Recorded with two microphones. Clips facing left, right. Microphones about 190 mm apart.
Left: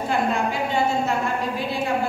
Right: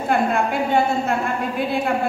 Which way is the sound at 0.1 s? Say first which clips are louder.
Right 4 dB; 55° right (ahead or behind).